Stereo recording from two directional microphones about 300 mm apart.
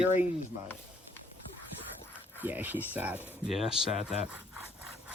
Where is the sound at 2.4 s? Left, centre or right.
Centre.